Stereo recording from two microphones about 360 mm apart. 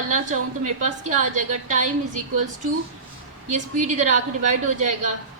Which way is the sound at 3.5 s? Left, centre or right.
Centre.